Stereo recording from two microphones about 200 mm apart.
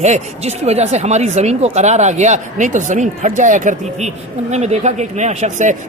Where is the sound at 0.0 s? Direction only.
35° right (ahead or behind).